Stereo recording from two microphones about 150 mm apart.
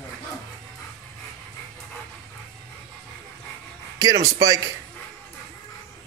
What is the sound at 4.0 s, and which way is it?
Speech, 25° right (ahead or behind).